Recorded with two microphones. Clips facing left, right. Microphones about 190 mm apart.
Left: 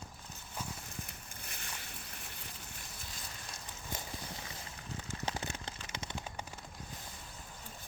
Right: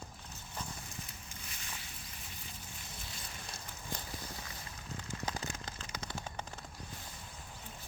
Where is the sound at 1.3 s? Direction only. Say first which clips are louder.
Left 1 dB; 55° left (ahead or behind).